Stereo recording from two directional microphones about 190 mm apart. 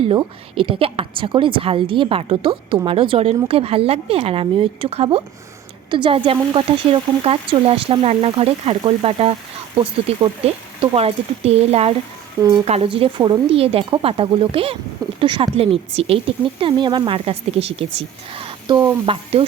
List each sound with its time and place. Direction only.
0.1 s a woman's voice: 25° right (ahead or behind)